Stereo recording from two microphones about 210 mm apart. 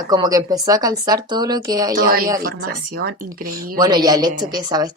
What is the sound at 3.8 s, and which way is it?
Speech, 20° right (ahead or behind).